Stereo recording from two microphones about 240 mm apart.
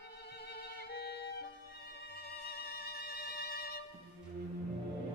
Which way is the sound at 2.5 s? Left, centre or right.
Left.